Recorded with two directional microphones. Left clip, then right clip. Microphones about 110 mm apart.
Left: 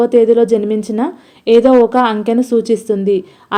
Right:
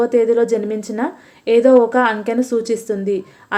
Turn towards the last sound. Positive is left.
turn(degrees=35)  # may be behind; listen again after turning